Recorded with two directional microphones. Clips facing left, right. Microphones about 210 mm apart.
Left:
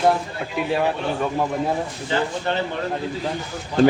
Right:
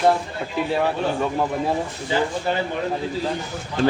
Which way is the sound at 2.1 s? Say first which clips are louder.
Right 1 dB; 10° right (ahead or behind).